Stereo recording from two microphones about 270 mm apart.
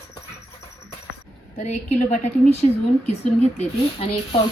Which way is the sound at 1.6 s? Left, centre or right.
Left.